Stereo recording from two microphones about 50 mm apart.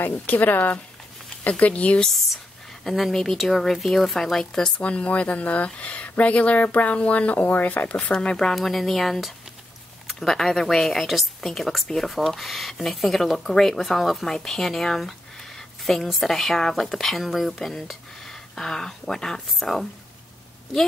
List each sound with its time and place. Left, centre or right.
0.0 s speech: left
2.8 s speech: centre
4.8 s speech: left
7.9 s speech: centre
8.5 s speech: centre